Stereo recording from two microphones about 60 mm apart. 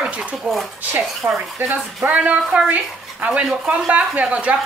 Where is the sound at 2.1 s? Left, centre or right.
Right.